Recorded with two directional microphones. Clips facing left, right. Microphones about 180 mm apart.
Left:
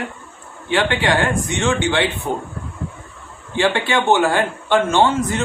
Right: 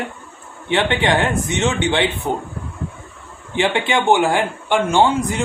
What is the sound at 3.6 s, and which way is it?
A man's voice, 15° right (ahead or behind).